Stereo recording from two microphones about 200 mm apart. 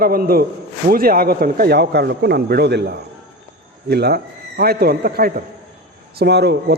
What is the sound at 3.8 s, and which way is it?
A man's voice, 55° right (ahead or behind).